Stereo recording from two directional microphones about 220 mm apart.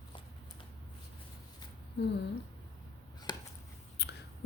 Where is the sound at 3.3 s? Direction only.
20° left (ahead or behind).